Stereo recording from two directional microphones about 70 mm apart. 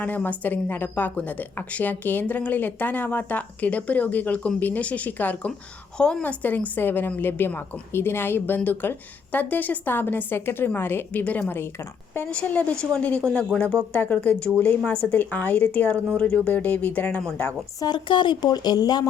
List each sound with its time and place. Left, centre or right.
0.0 s speech: left
6.0 s a woman's voice: centre
6.2 s a woman's voice: left
12.3 s speech: centre
12.7 s a woman's voice: centre
13.0 s speech: left
17.7 s speech: left